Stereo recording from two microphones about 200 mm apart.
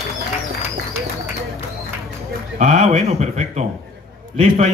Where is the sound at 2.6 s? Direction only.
35° right (ahead or behind).